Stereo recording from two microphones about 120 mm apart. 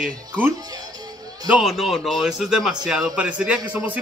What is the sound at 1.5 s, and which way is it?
A man's voice, centre (ahead or behind).